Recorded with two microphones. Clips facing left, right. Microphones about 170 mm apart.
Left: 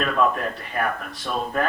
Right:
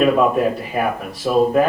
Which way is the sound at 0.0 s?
5° right (ahead or behind).